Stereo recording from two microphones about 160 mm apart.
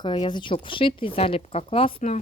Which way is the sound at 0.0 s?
30° left (ahead or behind).